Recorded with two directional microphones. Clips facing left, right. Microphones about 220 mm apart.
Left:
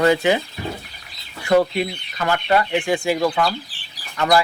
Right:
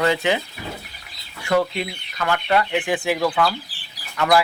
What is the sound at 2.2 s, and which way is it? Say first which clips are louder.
Speech: left 2 dB; 25° left (ahead or behind).